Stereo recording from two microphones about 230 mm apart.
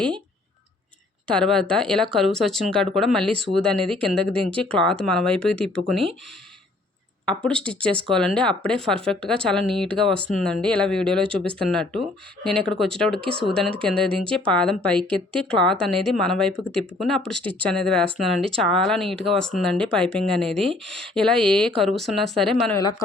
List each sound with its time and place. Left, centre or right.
1.3 s speech: centre
7.3 s speech: centre
22.8 s speech: centre